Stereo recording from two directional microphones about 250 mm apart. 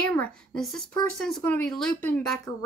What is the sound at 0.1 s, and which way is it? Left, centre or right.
Speech, centre.